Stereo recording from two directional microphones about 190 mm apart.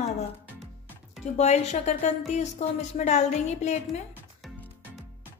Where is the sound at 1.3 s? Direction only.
35° left (ahead or behind).